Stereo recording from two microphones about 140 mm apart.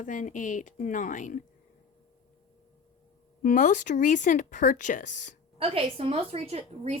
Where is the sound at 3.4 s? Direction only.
70° left (ahead or behind).